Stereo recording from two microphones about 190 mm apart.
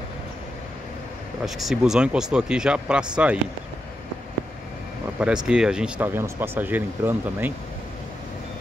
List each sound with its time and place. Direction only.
1.4 s speech: centre (ahead or behind)
5.5 s speech: 5° right (ahead or behind)